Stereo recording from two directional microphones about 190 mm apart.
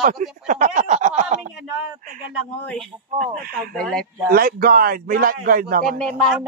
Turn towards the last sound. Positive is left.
turn(degrees=5)  # may be behind; listen again after turning